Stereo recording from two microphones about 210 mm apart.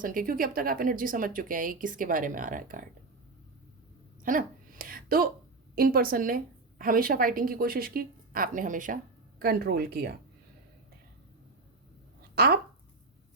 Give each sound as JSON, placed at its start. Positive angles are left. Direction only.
{"t": 0.0, "sound": "speech", "side_deg": -40}
{"t": 4.2, "sound": "a sound", "side_deg": -40}
{"t": 5.7, "sound": "a woman's voice", "side_deg": -45}
{"t": 12.3, "sound": "speech", "side_deg": -45}